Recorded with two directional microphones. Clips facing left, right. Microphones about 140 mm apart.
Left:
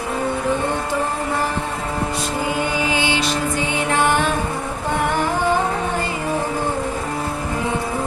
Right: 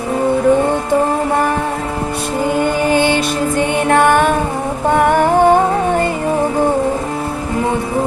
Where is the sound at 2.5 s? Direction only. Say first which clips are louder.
Right 9 dB; 50° right (ahead or behind).